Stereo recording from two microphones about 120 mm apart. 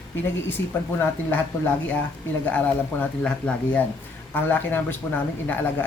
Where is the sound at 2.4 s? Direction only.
15° left (ahead or behind).